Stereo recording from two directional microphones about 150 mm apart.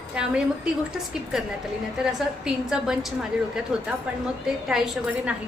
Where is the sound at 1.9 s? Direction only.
5° right (ahead or behind).